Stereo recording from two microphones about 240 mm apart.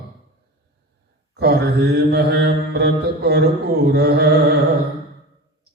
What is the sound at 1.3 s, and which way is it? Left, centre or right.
Mantra, right.